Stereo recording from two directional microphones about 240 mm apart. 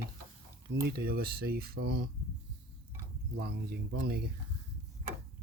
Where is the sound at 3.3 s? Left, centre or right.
Right.